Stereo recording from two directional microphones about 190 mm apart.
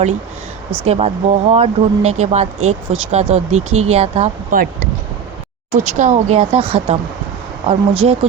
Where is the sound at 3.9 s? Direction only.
35° right (ahead or behind).